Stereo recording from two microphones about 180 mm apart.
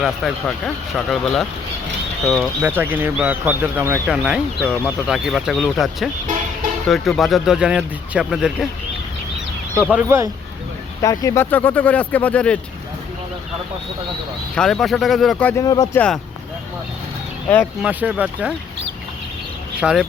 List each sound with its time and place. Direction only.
0.0 s speech: centre (ahead or behind)
4.6 s speech: 10° left (ahead or behind)
4.9 s speech: 5° right (ahead or behind)
9.9 s speech: 15° right (ahead or behind)
11.0 s speech: 20° left (ahead or behind)
14.5 s speech: 5° left (ahead or behind)
15.6 s speech: 20° left (ahead or behind)
16.0 s speech: 5° left (ahead or behind)
17.8 s speech: 10° right (ahead or behind)
19.8 s speech: 5° right (ahead or behind)